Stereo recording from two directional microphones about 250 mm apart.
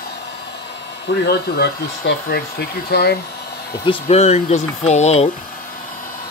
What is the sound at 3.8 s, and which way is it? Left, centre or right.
Speech, left.